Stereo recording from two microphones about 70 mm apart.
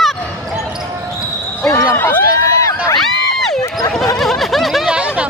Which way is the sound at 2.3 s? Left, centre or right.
Left.